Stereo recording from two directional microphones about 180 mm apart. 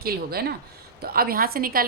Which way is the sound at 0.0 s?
60° right (ahead or behind).